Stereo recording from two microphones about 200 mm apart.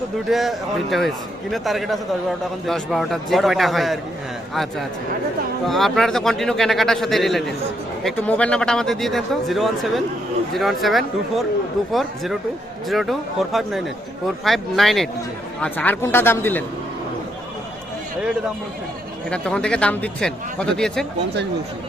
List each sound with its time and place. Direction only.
0.3 s speech: centre (ahead or behind)
19.3 s speech: 5° left (ahead or behind)